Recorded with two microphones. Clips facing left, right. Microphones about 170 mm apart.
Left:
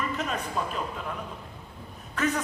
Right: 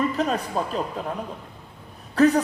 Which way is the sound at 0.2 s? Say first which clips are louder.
Right 6 dB; 35° right (ahead or behind).